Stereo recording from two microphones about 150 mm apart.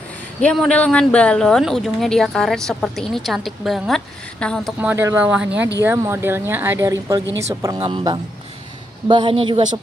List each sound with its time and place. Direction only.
0.4 s speech: 5° left (ahead or behind)
4.7 s a woman's voice: 15° right (ahead or behind); by 9.7 s 35° right (ahead or behind)